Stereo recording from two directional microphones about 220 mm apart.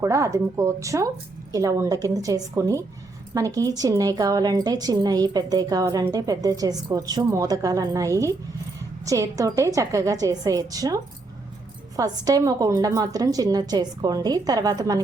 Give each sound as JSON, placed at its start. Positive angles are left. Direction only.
{"t": 0.0, "sound": "a woman's voice", "side_deg": -15}